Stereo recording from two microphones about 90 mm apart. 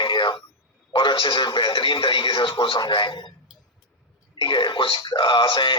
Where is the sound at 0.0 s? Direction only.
70° left (ahead or behind).